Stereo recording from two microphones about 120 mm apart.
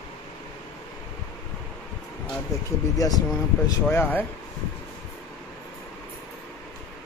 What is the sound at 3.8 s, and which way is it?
Speech, 15° left (ahead or behind).